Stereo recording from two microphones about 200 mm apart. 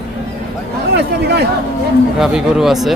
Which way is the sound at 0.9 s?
55° right (ahead or behind).